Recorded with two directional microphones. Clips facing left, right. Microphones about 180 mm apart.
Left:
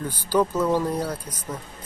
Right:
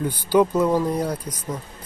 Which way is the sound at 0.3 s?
10° right (ahead or behind).